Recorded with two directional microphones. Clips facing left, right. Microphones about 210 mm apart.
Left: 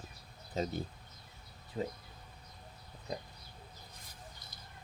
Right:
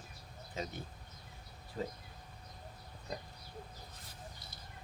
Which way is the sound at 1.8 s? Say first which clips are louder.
Left 3 dB; 20° left (ahead or behind).